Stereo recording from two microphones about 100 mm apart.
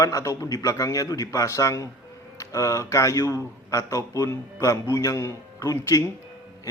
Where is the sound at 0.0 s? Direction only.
35° left (ahead or behind).